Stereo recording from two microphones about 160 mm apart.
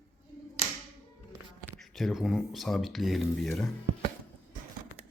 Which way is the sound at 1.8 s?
Centre (ahead or behind).